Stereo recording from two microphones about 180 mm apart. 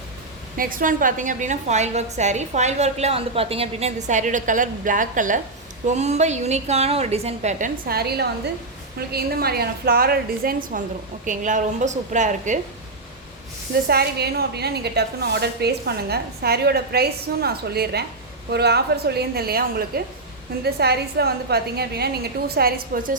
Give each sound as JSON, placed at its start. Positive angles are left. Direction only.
{"t": 0.5, "sound": "a woman's voice", "side_deg": -50}
{"t": 7.9, "sound": "a woman's voice", "side_deg": -60}
{"t": 13.8, "sound": "a woman's voice", "side_deg": -60}